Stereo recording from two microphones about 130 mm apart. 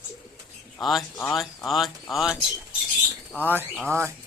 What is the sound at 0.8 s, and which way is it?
Speech, centre (ahead or behind).